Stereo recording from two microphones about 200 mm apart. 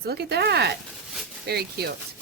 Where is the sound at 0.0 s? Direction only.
55° right (ahead or behind).